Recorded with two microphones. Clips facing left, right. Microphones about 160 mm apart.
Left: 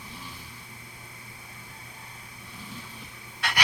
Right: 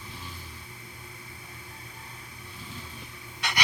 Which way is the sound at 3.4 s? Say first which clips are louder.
Left 1 dB; 5° left (ahead or behind).